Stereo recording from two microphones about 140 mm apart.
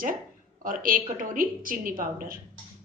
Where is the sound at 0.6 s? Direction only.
85° right.